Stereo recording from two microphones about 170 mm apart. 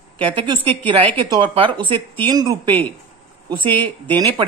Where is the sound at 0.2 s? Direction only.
30° right (ahead or behind).